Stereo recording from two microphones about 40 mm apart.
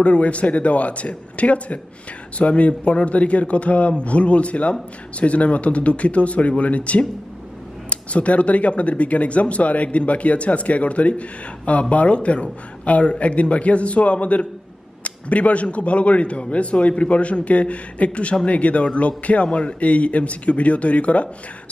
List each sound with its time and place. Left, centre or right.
0.0 s speech: left